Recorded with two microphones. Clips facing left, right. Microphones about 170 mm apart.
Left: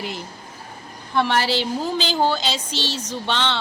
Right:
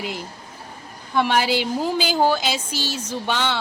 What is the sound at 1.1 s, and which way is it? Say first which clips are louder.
A woman's voice: right 1 dB; 15° right (ahead or behind).